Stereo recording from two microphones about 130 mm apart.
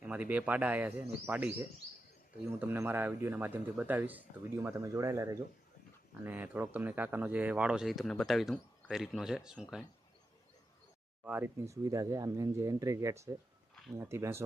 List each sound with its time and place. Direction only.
0.0 s speech: 10° right (ahead or behind)
4.6 s speech: 25° right (ahead or behind); by 9.8 s 5° right (ahead or behind)
11.2 s speech: 15° right (ahead or behind)